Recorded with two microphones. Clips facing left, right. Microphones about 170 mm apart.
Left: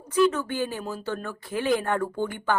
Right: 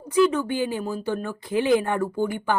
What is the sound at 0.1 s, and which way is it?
Speech, 10° right (ahead or behind).